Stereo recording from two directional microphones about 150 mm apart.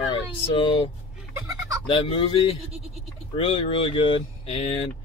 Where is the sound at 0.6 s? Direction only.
35° left (ahead or behind).